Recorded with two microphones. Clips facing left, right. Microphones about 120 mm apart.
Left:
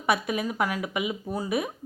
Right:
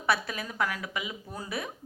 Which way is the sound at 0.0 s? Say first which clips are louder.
Left 4 dB; 15° left (ahead or behind).